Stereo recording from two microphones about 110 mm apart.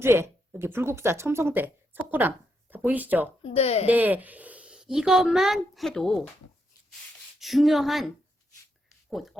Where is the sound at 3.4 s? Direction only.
70° left (ahead or behind).